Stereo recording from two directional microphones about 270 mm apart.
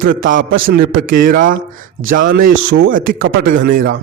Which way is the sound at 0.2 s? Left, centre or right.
Right.